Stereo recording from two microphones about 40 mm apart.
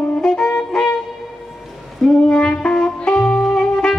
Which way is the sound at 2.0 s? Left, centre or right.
Centre.